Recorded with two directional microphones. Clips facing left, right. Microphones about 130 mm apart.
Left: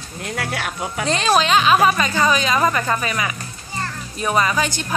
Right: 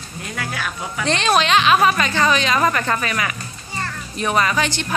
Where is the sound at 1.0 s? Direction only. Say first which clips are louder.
Even; 5° left (ahead or behind).